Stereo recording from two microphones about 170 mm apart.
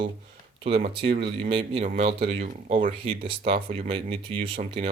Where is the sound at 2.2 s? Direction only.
50° right (ahead or behind).